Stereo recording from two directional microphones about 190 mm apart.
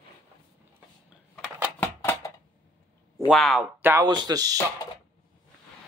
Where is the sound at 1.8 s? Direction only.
15° left (ahead or behind).